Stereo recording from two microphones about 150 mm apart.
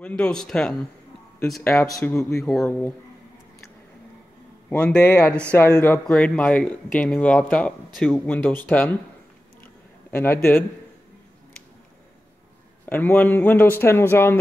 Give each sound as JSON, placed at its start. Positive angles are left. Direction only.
{"t": 0.0, "sound": "speech", "side_deg": 5}
{"t": 1.6, "sound": "speech", "side_deg": 15}
{"t": 4.6, "sound": "speech", "side_deg": 10}
{"t": 6.0, "sound": "speech", "side_deg": 5}
{"t": 10.1, "sound": "speech", "side_deg": 15}
{"t": 12.8, "sound": "speech", "side_deg": 15}